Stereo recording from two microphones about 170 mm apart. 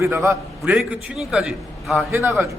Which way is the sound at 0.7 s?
Centre (ahead or behind).